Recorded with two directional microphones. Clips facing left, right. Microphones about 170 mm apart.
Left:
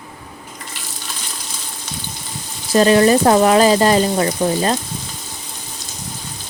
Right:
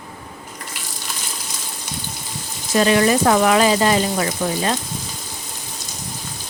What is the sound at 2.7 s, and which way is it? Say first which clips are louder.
Speech: left 4 dB; 35° left (ahead or behind).